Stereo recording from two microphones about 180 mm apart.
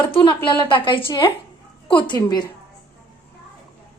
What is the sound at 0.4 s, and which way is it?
A woman's voice, 25° left (ahead or behind).